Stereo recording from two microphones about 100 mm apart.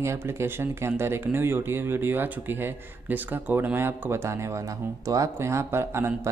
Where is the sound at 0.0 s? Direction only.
25° right (ahead or behind).